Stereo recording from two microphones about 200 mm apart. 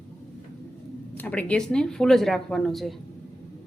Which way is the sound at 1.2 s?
5° left (ahead or behind).